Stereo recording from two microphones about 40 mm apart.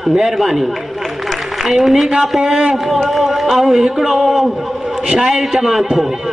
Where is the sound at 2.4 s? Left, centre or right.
Centre.